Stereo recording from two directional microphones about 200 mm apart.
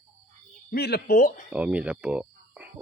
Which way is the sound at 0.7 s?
55° left (ahead or behind).